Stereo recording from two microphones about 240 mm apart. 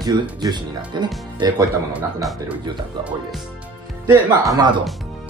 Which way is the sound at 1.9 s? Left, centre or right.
Centre.